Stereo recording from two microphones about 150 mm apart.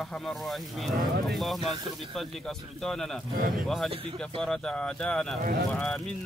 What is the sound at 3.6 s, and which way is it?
Speech, centre (ahead or behind).